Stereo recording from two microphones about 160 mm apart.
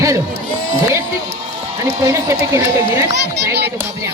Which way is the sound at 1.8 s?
20° right (ahead or behind).